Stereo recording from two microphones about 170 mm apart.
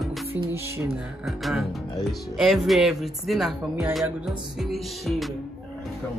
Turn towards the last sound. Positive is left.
turn(degrees=0)  # may be behind; listen again after turning